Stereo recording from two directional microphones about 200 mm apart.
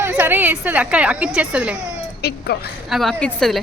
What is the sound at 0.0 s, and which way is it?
A woman's voice, 10° right (ahead or behind).